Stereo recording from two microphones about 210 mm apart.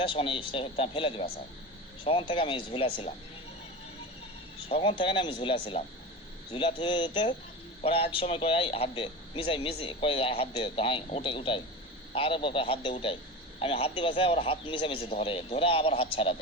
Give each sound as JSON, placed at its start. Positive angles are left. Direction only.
{"t": 0.0, "sound": "a man's voice", "side_deg": 25}
{"t": 4.7, "sound": "a man's voice", "side_deg": 25}